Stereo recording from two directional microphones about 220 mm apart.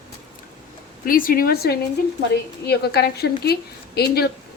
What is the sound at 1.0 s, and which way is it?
A woman's voice, 40° left (ahead or behind).